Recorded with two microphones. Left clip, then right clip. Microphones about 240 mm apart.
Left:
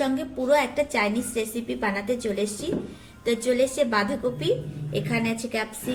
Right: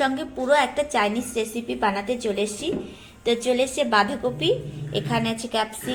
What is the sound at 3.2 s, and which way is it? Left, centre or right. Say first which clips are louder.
Speech: right 1 dB; centre.